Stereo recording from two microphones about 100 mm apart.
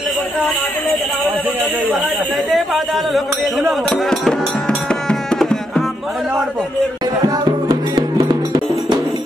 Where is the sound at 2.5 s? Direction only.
Centre (ahead or behind).